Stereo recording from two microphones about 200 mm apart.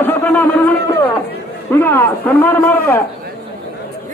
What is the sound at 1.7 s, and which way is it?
Speech, 10° left (ahead or behind).